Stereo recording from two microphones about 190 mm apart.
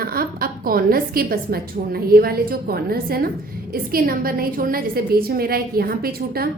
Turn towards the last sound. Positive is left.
turn(degrees=-55)  # may be behind; listen again after turning